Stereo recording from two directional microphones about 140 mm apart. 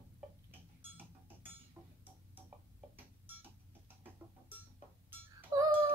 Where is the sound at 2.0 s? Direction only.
15° right (ahead or behind).